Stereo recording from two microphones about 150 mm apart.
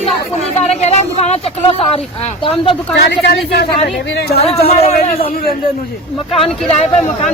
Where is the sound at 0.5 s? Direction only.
45° left (ahead or behind).